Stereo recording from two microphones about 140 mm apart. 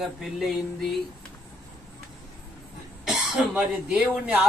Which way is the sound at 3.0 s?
5° right (ahead or behind).